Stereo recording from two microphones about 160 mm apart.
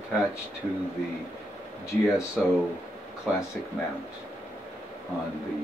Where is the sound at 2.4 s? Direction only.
5° left (ahead or behind).